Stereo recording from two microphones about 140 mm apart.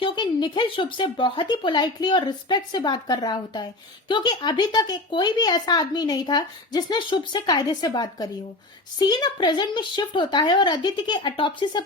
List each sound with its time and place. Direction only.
0.0 s speech: 35° left (ahead or behind)